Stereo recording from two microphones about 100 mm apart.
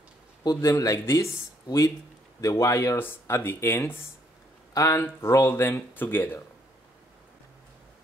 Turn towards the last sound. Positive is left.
turn(degrees=20)  # may be behind; listen again after turning